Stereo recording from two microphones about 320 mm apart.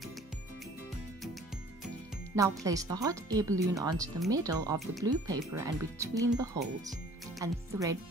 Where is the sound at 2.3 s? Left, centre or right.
Centre.